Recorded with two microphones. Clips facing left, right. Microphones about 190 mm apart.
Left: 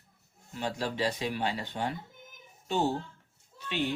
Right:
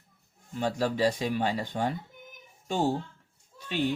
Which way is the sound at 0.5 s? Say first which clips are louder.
Right 5 dB; 45° right (ahead or behind).